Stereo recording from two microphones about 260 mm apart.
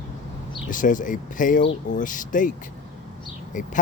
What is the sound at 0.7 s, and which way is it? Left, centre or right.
Speech, left.